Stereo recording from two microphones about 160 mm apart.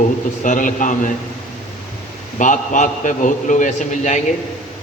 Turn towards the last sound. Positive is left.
turn(degrees=50)  # may be behind; listen again after turning